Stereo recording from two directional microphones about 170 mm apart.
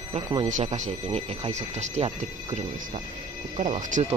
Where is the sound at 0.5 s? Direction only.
40° right (ahead or behind).